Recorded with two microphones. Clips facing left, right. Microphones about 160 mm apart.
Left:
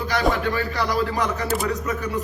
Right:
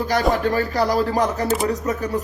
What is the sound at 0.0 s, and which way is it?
A man's voice, 40° right (ahead or behind).